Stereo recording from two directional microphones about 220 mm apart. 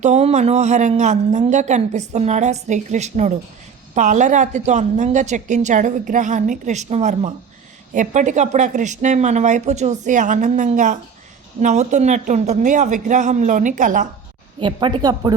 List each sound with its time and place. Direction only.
0.0 s a woman's voice: 30° right (ahead or behind)
14.6 s a woman's voice: 20° right (ahead or behind)